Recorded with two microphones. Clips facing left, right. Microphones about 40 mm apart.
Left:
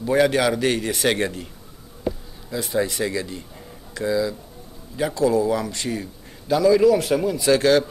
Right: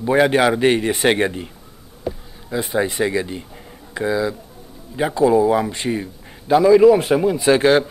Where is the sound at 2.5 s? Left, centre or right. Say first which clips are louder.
Right 3 dB; right.